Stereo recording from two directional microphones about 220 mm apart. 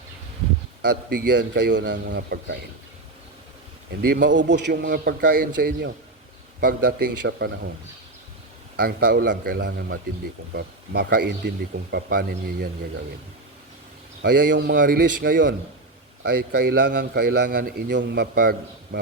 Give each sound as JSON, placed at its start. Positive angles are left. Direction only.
{"t": 0.8, "sound": "a man's voice", "side_deg": -50}
{"t": 4.1, "sound": "a man's voice", "side_deg": -55}
{"t": 8.7, "sound": "a man's voice", "side_deg": -45}
{"t": 14.2, "sound": "a man's voice", "side_deg": -45}